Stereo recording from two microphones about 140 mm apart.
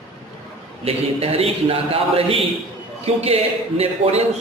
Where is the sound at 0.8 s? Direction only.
45° right (ahead or behind).